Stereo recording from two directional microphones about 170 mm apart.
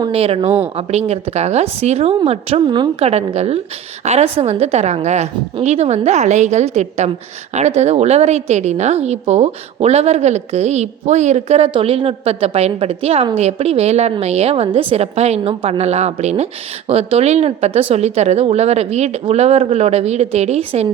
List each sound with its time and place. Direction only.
0.0 s a woman's voice: 35° right (ahead or behind)
3.1 s a woman's voice: 40° right (ahead or behind)